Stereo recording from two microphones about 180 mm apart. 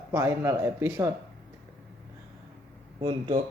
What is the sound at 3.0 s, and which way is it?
Speech, 25° right (ahead or behind).